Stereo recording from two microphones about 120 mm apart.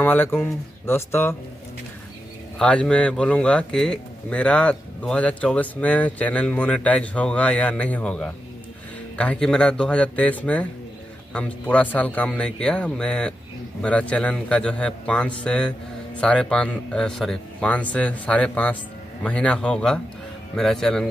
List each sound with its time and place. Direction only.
0.0 s speech: 15° left (ahead or behind)
2.6 s a man's voice: 10° left (ahead or behind)